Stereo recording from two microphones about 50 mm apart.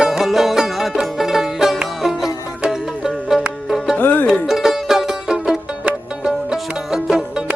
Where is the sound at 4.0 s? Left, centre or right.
Left.